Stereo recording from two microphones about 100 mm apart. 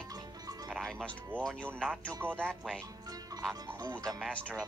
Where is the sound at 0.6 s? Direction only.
5° left (ahead or behind).